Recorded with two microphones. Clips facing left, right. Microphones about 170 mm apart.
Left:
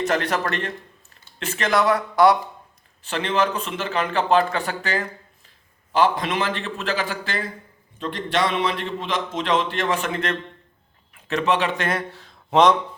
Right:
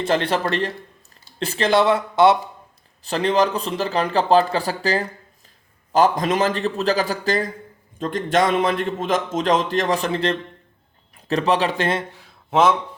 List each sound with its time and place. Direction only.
0.0 s a man's voice: 30° right (ahead or behind)
3.0 s a man's voice: 35° right (ahead or behind)
12.1 s a sound: 5° right (ahead or behind)